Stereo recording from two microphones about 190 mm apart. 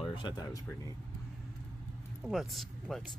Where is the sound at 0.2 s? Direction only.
20° left (ahead or behind).